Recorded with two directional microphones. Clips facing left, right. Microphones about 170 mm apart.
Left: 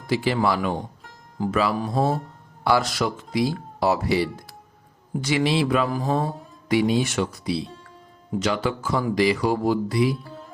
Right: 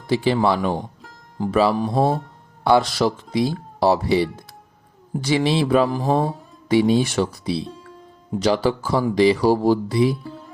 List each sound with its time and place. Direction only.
0.1 s speech: 25° right (ahead or behind)